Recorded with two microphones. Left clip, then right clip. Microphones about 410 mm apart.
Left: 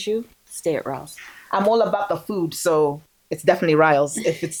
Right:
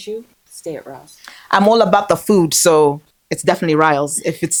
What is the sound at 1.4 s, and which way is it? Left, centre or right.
Speech, right.